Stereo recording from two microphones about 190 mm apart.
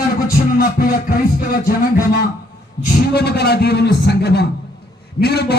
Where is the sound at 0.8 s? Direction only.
50° left (ahead or behind).